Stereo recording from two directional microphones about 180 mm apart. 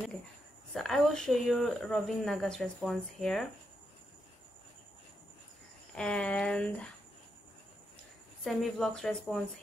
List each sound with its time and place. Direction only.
0.7 s speech: centre (ahead or behind)
5.9 s speech: 5° left (ahead or behind)
8.5 s speech: centre (ahead or behind)